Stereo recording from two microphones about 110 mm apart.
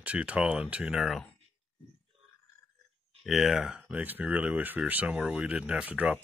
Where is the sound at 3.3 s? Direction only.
5° right (ahead or behind).